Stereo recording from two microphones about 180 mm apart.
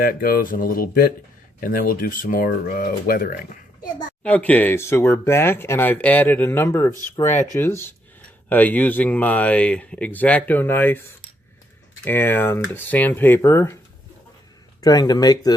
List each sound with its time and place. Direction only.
0.0 s speech: 55° left (ahead or behind)
4.2 s speech: 10° left (ahead or behind)
12.0 s speech: 10° left (ahead or behind)
14.8 s speech: 20° left (ahead or behind)